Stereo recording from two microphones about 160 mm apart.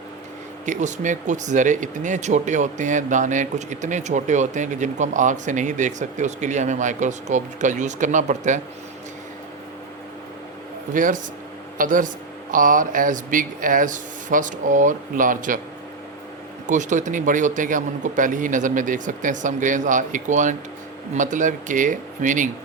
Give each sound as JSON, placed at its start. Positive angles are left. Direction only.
{"t": 0.6, "sound": "speech", "side_deg": -50}
{"t": 10.9, "sound": "speech", "side_deg": -55}
{"t": 16.6, "sound": "speech", "side_deg": -50}